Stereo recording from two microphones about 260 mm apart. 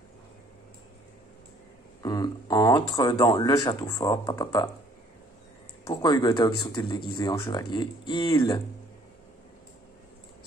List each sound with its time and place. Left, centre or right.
2.0 s speech: centre
5.9 s speech: centre